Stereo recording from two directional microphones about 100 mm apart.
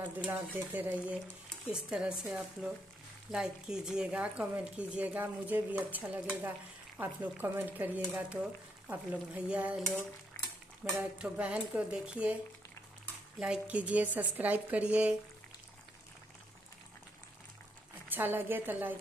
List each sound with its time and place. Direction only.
0.2 s speech: 15° right (ahead or behind)
11.0 s speech: 10° right (ahead or behind)
13.4 s speech: 10° right (ahead or behind)
18.1 s a woman's voice: 20° right (ahead or behind)